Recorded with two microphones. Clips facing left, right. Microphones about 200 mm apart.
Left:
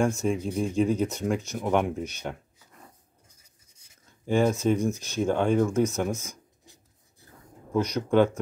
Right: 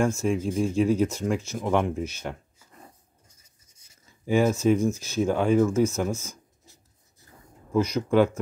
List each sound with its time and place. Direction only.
0.2 s speech: centre (ahead or behind)
4.0 s speech: 5° right (ahead or behind)
6.0 s speech: 15° left (ahead or behind)
6.6 s filing: 65° left (ahead or behind)
7.7 s speech: 5° right (ahead or behind)